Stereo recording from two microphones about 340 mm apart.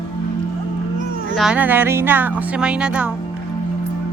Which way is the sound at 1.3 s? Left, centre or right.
Centre.